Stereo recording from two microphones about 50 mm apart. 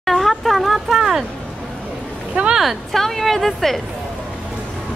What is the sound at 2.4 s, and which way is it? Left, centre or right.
Speech, right.